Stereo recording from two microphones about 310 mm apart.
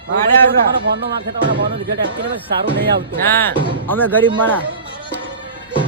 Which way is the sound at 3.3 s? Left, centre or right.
Centre.